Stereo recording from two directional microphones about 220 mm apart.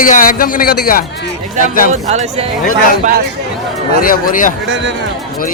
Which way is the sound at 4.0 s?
40° left (ahead or behind).